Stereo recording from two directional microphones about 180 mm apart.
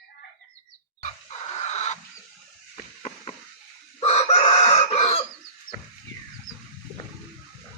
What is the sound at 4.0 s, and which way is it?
Chicken, 35° left (ahead or behind).